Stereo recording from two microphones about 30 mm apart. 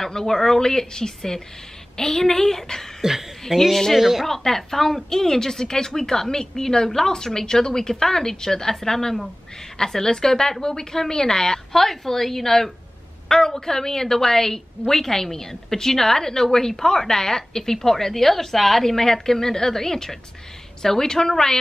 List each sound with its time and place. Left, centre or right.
0.0 s a woman's voice: centre
3.0 s speech: centre
4.3 s a woman's voice: centre
11.8 s a woman's voice: centre